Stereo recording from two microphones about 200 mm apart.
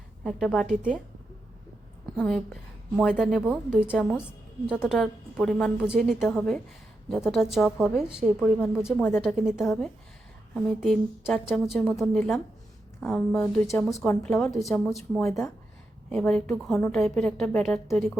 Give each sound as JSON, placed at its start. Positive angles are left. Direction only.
{"t": 0.3, "sound": "a woman's voice", "side_deg": 0}
{"t": 2.1, "sound": "a woman's voice", "side_deg": 0}
{"t": 9.0, "sound": "a woman's voice", "side_deg": 10}
{"t": 9.5, "sound": "a woman's voice", "side_deg": 0}